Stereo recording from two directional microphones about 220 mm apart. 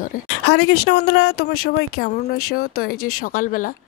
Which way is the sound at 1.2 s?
45° left (ahead or behind).